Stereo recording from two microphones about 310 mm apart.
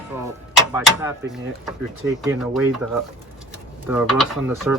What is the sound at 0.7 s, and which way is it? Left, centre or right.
Speech, centre.